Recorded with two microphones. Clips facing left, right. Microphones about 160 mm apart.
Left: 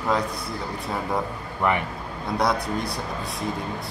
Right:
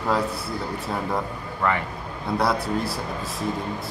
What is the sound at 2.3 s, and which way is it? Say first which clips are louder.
Speech: right 1 dB; 5° right (ahead or behind).